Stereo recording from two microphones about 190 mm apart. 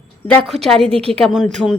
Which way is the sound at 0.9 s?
30° right (ahead or behind).